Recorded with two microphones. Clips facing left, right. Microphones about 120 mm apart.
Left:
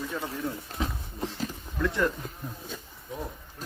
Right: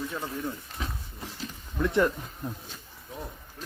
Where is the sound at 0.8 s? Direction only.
30° left (ahead or behind).